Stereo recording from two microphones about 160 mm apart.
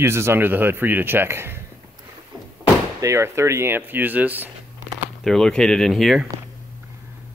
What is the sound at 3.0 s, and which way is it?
Speech, 20° right (ahead or behind).